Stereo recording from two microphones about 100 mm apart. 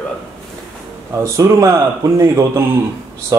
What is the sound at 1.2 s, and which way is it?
A man's voice, 30° right (ahead or behind).